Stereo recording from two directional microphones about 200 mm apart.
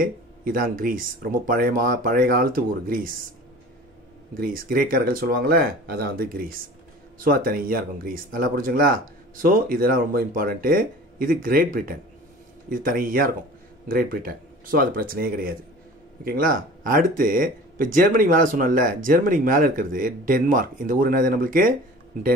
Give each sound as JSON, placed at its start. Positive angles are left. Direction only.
{"t": 0.0, "sound": "speech", "side_deg": -45}
{"t": 4.4, "sound": "speech", "side_deg": -45}